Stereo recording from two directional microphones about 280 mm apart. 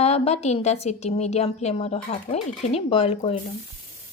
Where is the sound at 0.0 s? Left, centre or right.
Left.